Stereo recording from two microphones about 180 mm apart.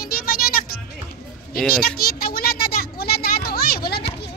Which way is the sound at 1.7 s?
55° left (ahead or behind).